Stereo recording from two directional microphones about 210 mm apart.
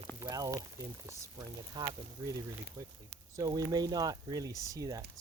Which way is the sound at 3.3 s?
15° right (ahead or behind).